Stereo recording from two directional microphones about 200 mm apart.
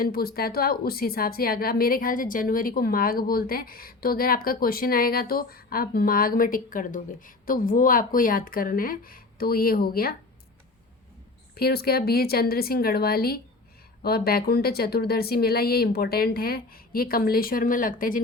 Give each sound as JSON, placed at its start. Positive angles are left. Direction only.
{"t": 0.0, "sound": "speech", "side_deg": 50}
{"t": 11.5, "sound": "speech", "side_deg": 50}